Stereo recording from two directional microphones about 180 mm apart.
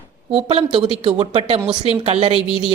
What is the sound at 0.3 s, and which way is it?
Speech, 30° right (ahead or behind).